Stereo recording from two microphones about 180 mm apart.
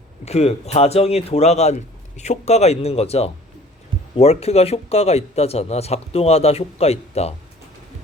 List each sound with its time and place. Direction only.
0.3 s speech: 35° left (ahead or behind)